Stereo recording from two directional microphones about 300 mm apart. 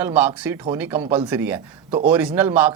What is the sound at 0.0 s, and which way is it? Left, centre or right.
Speech, centre.